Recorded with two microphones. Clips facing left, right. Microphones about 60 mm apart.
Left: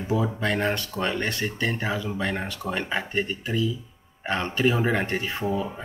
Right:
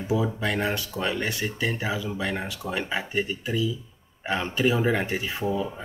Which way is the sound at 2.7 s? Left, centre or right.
Centre.